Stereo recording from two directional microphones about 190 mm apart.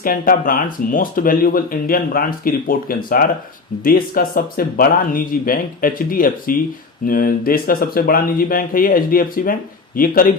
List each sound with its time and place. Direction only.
0.0 s speech: 50° left (ahead or behind)